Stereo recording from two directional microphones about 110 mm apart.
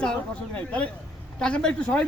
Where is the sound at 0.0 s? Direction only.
10° left (ahead or behind).